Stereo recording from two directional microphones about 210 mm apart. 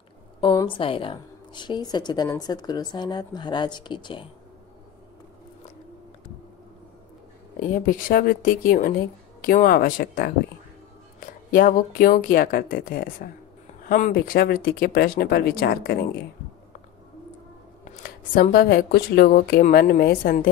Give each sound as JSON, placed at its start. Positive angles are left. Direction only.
{"t": 0.4, "sound": "a woman's voice", "side_deg": 25}
{"t": 7.6, "sound": "speech", "side_deg": 40}
{"t": 18.0, "sound": "speech", "side_deg": 45}